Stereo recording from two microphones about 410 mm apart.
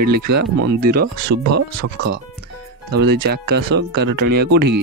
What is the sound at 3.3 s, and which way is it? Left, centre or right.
Speech, right.